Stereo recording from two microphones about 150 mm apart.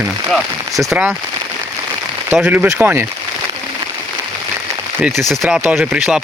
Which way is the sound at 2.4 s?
15° right (ahead or behind).